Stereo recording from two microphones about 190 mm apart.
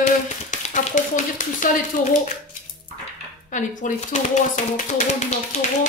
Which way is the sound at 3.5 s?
40° left (ahead or behind).